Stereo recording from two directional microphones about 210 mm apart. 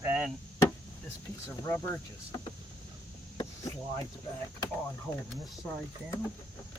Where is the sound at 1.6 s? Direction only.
10° left (ahead or behind).